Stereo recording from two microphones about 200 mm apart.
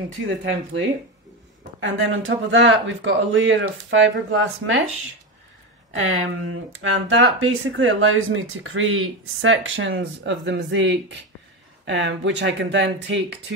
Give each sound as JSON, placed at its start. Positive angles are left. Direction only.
{"t": 1.8, "sound": "speech", "side_deg": -75}
{"t": 5.9, "sound": "speech", "side_deg": -70}